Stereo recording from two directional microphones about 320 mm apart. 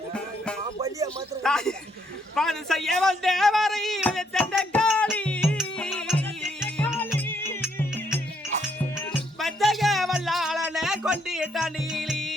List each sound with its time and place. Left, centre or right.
0.8 s music: centre
1.5 s a sound: centre
9.0 s music: centre